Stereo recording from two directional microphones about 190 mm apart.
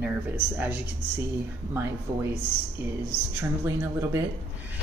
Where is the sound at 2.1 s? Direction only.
15° right (ahead or behind).